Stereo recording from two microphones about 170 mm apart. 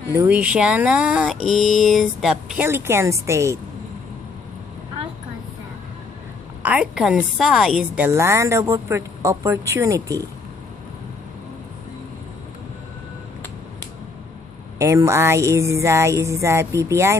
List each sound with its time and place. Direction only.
0.1 s a woman's voice: 15° right (ahead or behind)
6.6 s a woman's voice: 5° right (ahead or behind)
14.8 s a woman's voice: 15° right (ahead or behind)